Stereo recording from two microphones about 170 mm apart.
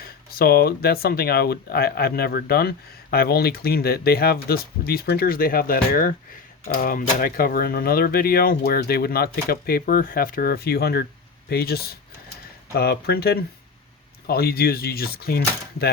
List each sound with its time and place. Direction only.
0.3 s speech: 65° left (ahead or behind)